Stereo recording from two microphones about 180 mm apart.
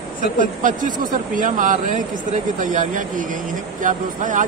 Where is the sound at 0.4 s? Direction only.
45° right (ahead or behind).